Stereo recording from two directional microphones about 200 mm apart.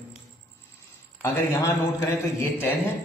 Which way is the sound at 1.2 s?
10° left (ahead or behind).